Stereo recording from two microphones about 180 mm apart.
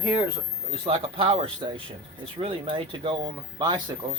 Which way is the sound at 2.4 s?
30° right (ahead or behind).